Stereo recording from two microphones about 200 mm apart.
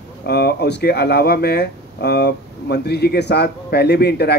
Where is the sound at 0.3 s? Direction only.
55° left (ahead or behind).